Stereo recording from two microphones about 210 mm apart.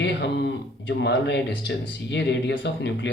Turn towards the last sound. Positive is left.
turn(degrees=55)  # may be behind; listen again after turning